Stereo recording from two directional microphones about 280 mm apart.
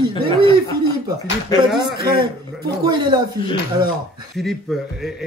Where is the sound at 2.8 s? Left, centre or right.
Centre.